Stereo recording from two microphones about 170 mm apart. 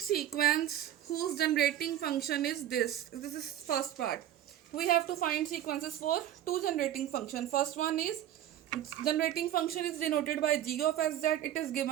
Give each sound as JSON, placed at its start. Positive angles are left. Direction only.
{"t": 0.0, "sound": "speech", "side_deg": 60}